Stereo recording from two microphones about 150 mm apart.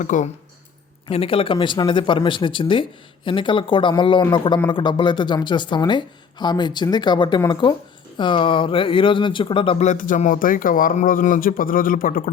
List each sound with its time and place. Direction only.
0.0 s speech: 55° left (ahead or behind)
1.0 s speech: 40° left (ahead or behind)
9.8 s speech: 55° left (ahead or behind)